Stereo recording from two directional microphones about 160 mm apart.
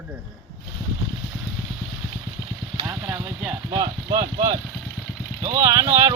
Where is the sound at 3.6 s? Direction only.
30° right (ahead or behind).